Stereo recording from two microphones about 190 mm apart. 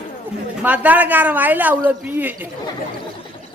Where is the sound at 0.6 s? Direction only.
10° right (ahead or behind).